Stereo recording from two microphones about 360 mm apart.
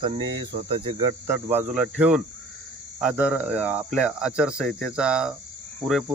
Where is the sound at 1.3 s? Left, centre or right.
Centre.